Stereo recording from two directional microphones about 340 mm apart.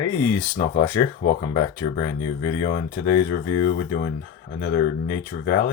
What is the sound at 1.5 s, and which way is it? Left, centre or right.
Speech, left.